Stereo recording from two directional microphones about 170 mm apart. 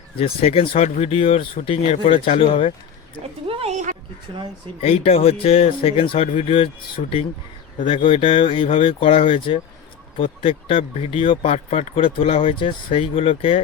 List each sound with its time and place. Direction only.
0.2 s speech: 35° left (ahead or behind)
3.4 s a sound: 35° right (ahead or behind)
4.8 s speech: 35° left (ahead or behind)